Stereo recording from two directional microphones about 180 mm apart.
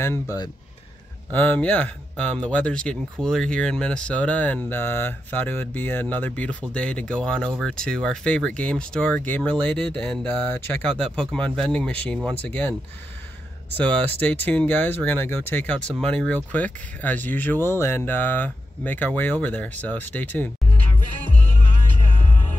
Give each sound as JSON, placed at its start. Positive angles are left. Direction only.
{"t": 0.0, "sound": "speech", "side_deg": 15}
{"t": 13.7, "sound": "speech", "side_deg": 10}